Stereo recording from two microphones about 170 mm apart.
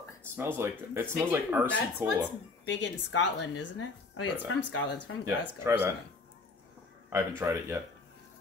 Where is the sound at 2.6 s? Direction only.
90° left.